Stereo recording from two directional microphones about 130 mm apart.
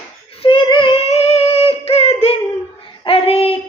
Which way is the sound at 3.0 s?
45° left (ahead or behind).